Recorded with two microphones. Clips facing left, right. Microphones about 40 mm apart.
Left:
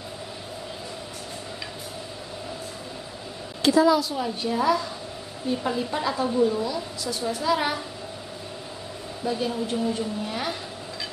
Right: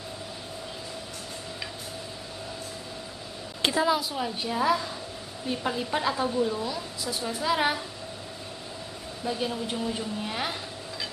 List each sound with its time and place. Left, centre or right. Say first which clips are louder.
3.6 s a woman's voice: left 6 dB; right
4.1 s a woman's voice: left 3 dB; centre
6.2 s a woman's voice: left 4 dB; centre
6.6 s a woman's voice: left 3 dB; centre
9.2 s a woman's voice: left 3 dB; centre